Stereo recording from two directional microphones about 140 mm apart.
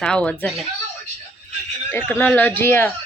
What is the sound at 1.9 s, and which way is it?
Speech, 15° left (ahead or behind).